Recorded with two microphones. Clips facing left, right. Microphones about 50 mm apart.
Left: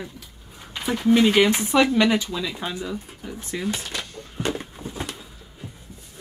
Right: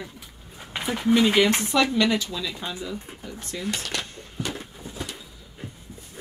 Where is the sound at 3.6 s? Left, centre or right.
Right.